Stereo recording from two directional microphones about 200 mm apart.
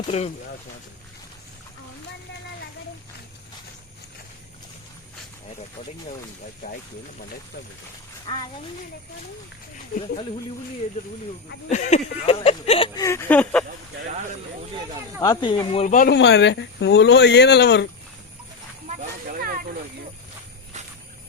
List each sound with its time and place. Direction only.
0.1 s speech: 30° left (ahead or behind)
8.3 s speech: 20° left (ahead or behind)
11.7 s speech: 35° left (ahead or behind)
13.0 s a sound: 15° left (ahead or behind)
15.2 s speech: 20° left (ahead or behind)
16.0 s speech: 60° left (ahead or behind)
19.3 s a sound: 45° right (ahead or behind)